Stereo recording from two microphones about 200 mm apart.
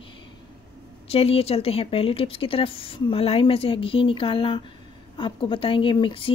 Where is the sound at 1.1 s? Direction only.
30° left (ahead or behind).